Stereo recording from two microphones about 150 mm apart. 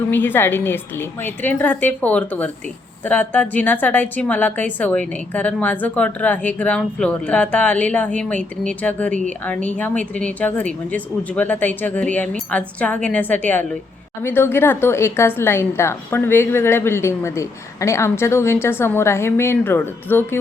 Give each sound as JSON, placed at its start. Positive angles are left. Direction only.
{"t": 0.1, "sound": "speech", "side_deg": 15}